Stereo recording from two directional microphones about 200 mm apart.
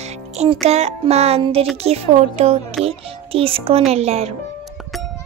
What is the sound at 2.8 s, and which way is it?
Speech, 30° right (ahead or behind).